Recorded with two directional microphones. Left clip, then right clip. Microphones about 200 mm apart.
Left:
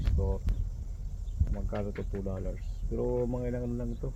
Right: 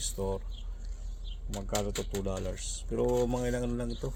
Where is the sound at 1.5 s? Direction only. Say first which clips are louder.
Right 4 dB; 20° right (ahead or behind).